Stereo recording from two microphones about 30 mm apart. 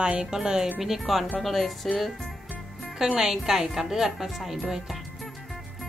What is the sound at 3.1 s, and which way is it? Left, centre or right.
Speech, centre.